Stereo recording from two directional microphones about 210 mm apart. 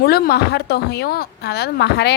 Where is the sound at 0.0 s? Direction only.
50° left (ahead or behind).